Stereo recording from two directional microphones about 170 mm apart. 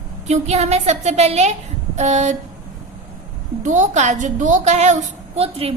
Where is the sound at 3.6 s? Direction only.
45° right (ahead or behind).